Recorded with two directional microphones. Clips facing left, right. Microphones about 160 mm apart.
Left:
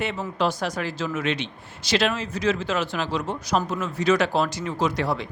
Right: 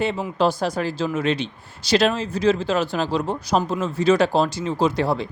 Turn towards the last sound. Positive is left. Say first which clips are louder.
# right 4 dB
turn(degrees=-30)  # may be behind; listen again after turning